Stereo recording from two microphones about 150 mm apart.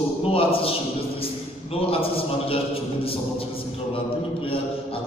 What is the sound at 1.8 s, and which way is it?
A man's voice, 40° left (ahead or behind).